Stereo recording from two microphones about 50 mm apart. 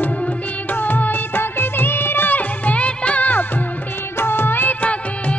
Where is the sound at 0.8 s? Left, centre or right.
Left.